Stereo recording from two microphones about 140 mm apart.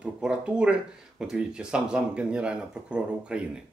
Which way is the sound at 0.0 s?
10° right (ahead or behind).